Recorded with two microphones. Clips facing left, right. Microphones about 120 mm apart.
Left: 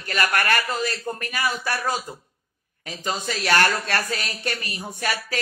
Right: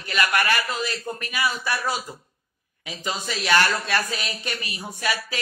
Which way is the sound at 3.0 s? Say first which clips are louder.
Left 2 dB; 50° left (ahead or behind).